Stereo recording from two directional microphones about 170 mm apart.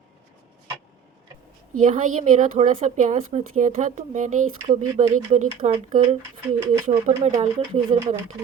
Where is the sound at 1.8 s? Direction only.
45° right (ahead or behind).